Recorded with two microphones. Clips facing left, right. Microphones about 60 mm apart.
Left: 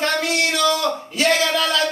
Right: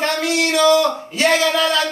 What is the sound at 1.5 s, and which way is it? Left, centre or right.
Music, right.